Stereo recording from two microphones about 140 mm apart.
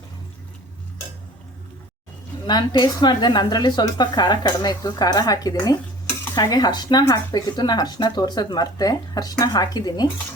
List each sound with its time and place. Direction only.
2.4 s speech: 30° left (ahead or behind)